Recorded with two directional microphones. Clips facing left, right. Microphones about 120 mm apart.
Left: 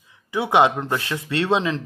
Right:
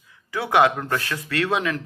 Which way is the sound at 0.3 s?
20° left (ahead or behind).